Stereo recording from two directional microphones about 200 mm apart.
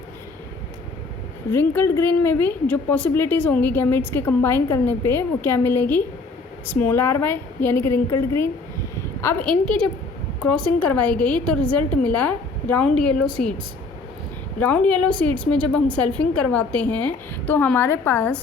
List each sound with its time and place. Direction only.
1.5 s a woman's voice: 10° left (ahead or behind)
14.6 s a woman's voice: 5° left (ahead or behind)